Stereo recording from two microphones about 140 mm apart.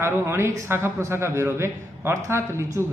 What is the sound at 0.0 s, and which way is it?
Speech, 20° right (ahead or behind).